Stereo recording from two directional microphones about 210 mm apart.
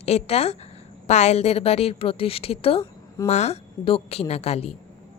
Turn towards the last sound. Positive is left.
turn(degrees=30)  # may be behind; listen again after turning